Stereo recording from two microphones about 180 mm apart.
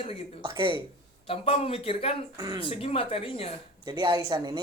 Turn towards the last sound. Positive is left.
turn(degrees=-25)  # may be behind; listen again after turning